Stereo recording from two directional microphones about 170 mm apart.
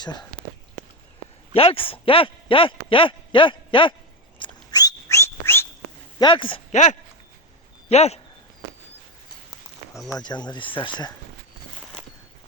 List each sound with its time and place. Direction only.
0.0 s speech: 25° left (ahead or behind)
1.5 s speech: 35° left (ahead or behind)
4.4 s whistling: 25° left (ahead or behind)
6.1 s speech: 30° left (ahead or behind)
6.7 s speech: 45° left (ahead or behind)
10.2 s speech: 25° left (ahead or behind)